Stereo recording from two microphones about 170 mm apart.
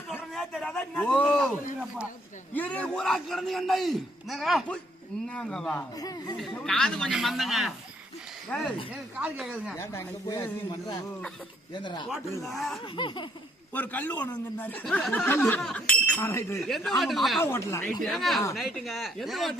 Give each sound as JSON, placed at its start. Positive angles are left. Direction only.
{"t": 0.1, "sound": "a sound", "side_deg": 5}
{"t": 2.5, "sound": "a man's voice", "side_deg": 10}
{"t": 6.0, "sound": "speech", "side_deg": 20}
{"t": 6.7, "sound": "a man's voice", "side_deg": 5}
{"t": 9.7, "sound": "speech", "side_deg": 15}
{"t": 12.4, "sound": "a man's voice", "side_deg": 0}
{"t": 13.0, "sound": "speech", "side_deg": 30}
{"t": 13.7, "sound": "speech", "side_deg": 10}
{"t": 16.6, "sound": "a man's voice", "side_deg": 0}
{"t": 17.4, "sound": "speech", "side_deg": 15}
{"t": 18.0, "sound": "a man's voice", "side_deg": 0}